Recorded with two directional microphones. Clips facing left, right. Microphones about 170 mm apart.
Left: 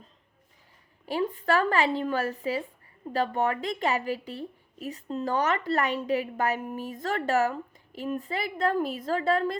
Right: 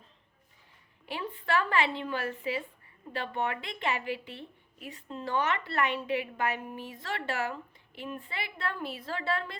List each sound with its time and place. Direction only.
1.0 s a woman's voice: 40° left (ahead or behind)